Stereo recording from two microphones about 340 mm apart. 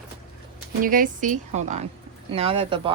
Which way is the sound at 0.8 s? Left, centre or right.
Right.